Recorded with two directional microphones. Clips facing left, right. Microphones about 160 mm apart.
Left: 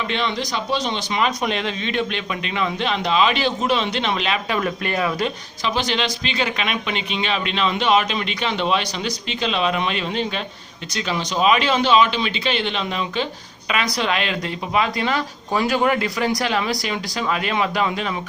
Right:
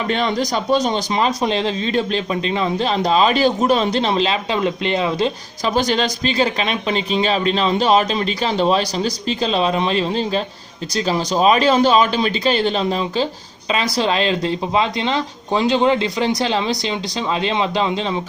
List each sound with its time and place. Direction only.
0.1 s speech: 45° right (ahead or behind); by 5.3 s 25° right (ahead or behind)
5.7 s speech: 40° right (ahead or behind)